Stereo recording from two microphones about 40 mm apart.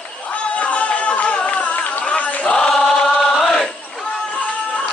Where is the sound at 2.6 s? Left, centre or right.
Centre.